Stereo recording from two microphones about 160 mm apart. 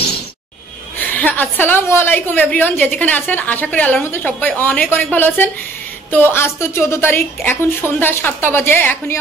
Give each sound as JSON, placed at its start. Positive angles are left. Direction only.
{"t": 0.9, "sound": "a woman's voice", "side_deg": 10}